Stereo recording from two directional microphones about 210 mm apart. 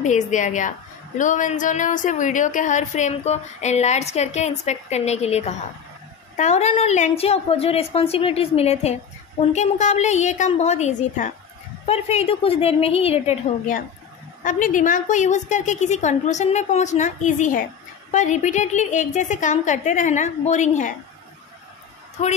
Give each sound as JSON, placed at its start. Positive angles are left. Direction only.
{"t": 0.0, "sound": "a woman's voice", "side_deg": 35}